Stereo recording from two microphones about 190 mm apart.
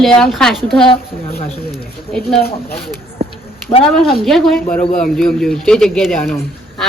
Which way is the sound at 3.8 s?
Centre (ahead or behind).